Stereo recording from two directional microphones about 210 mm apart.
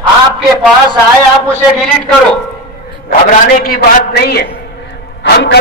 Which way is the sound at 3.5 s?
45° left (ahead or behind).